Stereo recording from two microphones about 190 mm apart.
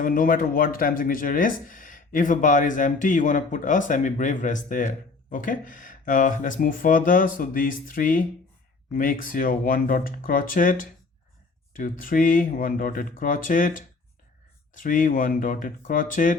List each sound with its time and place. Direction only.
0.0 s speech: 45° left (ahead or behind)